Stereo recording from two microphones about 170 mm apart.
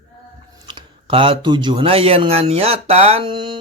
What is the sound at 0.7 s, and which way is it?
Speech, 30° right (ahead or behind).